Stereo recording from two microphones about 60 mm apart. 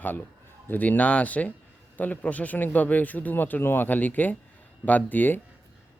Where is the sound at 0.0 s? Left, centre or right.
Left.